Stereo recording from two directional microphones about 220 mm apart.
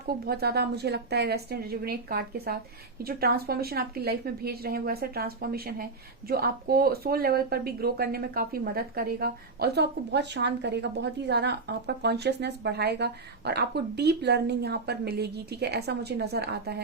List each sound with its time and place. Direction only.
0.0 s a woman's voice: 45° right (ahead or behind)